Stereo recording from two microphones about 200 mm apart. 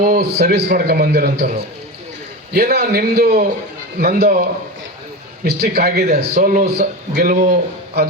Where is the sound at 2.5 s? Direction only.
50° right (ahead or behind).